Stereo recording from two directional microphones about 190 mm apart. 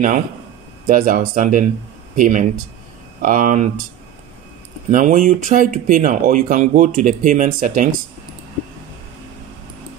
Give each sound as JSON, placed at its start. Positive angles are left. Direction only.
{"t": 0.8, "sound": "speech", "side_deg": -45}
{"t": 4.9, "sound": "speech", "side_deg": -45}